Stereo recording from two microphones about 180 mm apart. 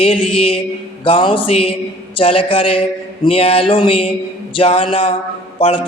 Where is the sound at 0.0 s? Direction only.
30° left (ahead or behind).